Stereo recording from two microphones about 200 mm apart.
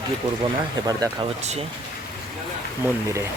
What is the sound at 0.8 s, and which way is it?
Speech, 20° right (ahead or behind).